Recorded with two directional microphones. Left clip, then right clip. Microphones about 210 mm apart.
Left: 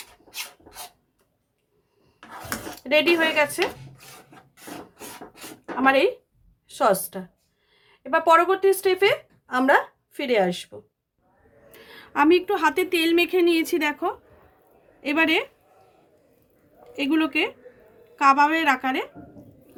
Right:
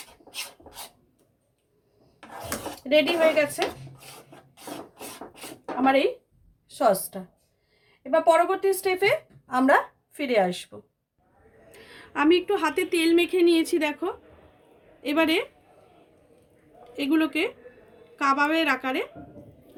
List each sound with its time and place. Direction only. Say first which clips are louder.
2.9 s a woman's voice: left 1 dB; 30° left (ahead or behind)
5.8 s a woman's voice: left 3 dB; 30° left (ahead or behind)
12.1 s a woman's voice: left 3 dB; 55° left (ahead or behind)
16.9 s a woman's voice: left 2 dB; 45° left (ahead or behind)